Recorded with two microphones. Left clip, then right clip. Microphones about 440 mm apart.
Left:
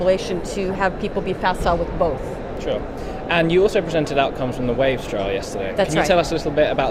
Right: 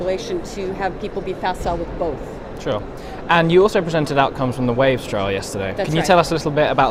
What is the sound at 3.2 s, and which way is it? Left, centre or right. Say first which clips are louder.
Speech: right 3 dB; right.